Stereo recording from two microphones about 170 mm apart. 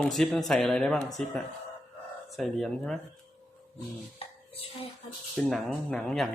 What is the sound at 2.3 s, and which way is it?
Speech, centre (ahead or behind).